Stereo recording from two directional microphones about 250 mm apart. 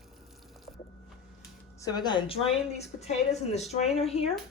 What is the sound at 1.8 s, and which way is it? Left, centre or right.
A woman's voice, centre.